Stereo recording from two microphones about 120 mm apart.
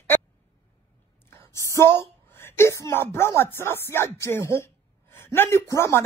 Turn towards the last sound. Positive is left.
turn(degrees=25)  # may be behind; listen again after turning